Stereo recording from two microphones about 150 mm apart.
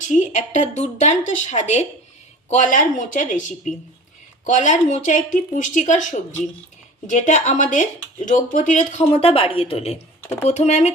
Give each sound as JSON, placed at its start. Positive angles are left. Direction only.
{"t": 0.0, "sound": "a woman's voice", "side_deg": 55}
{"t": 4.4, "sound": "speech", "side_deg": 55}
{"t": 9.1, "sound": "a woman's voice", "side_deg": 40}